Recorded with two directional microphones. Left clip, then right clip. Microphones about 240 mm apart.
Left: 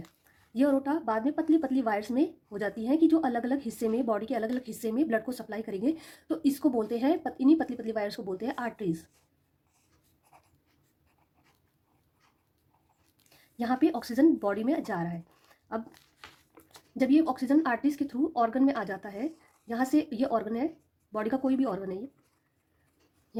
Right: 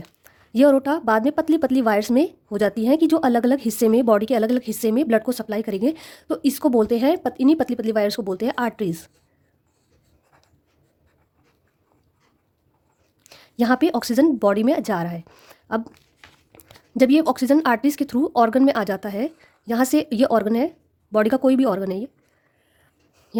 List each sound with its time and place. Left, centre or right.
0.3 s a woman's voice: right
13.3 s a woman's voice: right
23.3 s a sound: right